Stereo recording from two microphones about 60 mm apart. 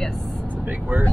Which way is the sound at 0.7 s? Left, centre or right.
Right.